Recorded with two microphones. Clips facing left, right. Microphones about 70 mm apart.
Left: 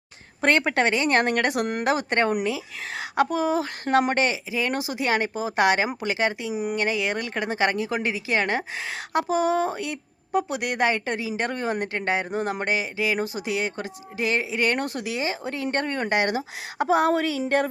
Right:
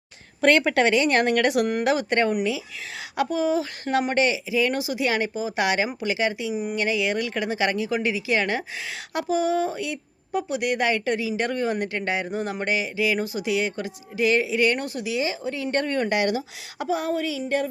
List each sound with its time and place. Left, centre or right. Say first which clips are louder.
0.4 s a woman's voice: right 2 dB; left
14.7 s speech: even; left
15.2 s a woman's voice: even; left
16.9 s speech: left 4 dB; left